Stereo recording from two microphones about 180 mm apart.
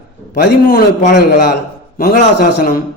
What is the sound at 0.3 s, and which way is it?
Speech, 60° left (ahead or behind).